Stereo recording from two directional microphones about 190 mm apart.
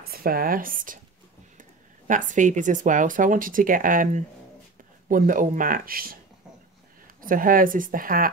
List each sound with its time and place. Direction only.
0.1 s speech: 50° right (ahead or behind)
7.2 s speech: 45° right (ahead or behind)